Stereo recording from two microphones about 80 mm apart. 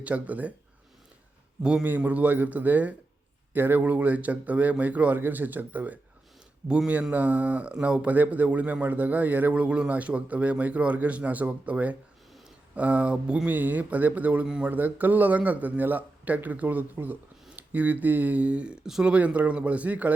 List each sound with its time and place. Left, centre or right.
0.0 s a man's voice: centre
1.6 s a man's voice: centre
1.9 s a man's voice: right
14.7 s a man's voice: right
19.1 s a man's voice: centre